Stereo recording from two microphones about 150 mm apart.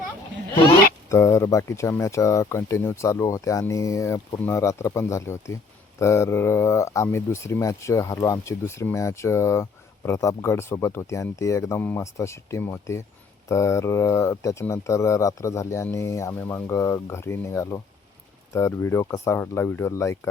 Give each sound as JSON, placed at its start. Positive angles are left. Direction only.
{"t": 1.1, "sound": "speech", "side_deg": 20}